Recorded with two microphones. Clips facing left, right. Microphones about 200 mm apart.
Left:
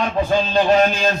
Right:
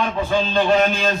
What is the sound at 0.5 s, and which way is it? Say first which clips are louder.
Music: left 2 dB; 40° left (ahead or behind).